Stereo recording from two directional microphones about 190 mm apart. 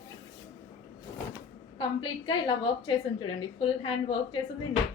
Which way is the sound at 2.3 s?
25° left (ahead or behind).